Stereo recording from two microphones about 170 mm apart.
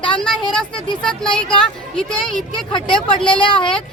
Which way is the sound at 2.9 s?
5° left (ahead or behind).